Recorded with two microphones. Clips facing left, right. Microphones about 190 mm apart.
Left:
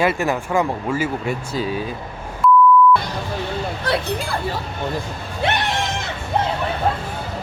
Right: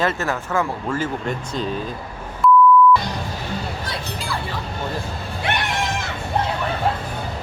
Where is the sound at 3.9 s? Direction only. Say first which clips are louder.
Left 9 dB; 60° left (ahead or behind).